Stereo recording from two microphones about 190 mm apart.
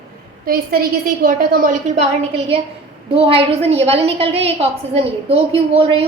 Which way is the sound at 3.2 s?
30° right (ahead or behind).